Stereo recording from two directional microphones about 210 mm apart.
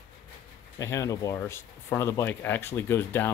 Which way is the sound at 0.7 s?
15° left (ahead or behind).